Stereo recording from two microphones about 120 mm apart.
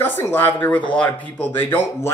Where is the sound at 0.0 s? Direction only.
20° left (ahead or behind).